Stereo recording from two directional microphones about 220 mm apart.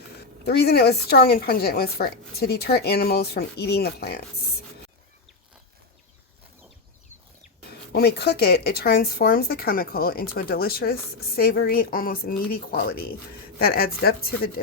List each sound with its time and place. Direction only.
0.4 s speech: 45° left (ahead or behind)
7.9 s speech: 45° left (ahead or behind)